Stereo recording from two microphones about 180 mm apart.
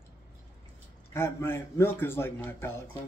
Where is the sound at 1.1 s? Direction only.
15° left (ahead or behind).